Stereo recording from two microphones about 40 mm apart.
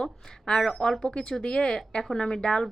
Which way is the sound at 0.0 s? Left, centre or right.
Centre.